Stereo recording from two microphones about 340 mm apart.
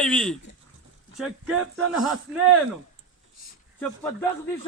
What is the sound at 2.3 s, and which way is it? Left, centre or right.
Speech, right.